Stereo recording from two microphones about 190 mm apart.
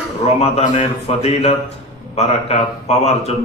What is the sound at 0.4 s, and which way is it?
A man's voice, 30° left (ahead or behind).